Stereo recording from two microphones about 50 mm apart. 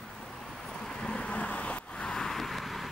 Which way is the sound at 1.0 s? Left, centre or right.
Centre.